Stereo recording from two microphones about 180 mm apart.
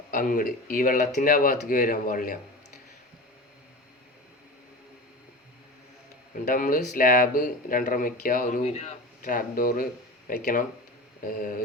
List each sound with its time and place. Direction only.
0.1 s speech: 50° left (ahead or behind)
6.4 s speech: 50° left (ahead or behind)